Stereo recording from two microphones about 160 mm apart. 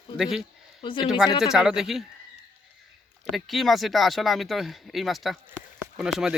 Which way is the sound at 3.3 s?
Centre (ahead or behind).